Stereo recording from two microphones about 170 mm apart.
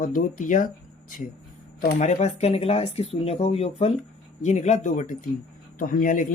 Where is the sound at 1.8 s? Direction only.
50° left (ahead or behind).